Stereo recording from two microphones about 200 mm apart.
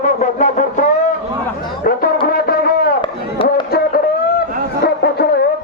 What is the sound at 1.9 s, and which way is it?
Music, 45° left (ahead or behind).